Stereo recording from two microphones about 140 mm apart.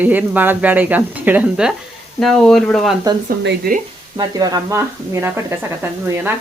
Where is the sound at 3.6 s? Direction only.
90° right.